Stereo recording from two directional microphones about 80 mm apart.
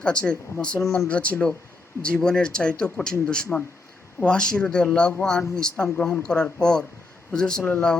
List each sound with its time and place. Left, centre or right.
0.0 s speech: centre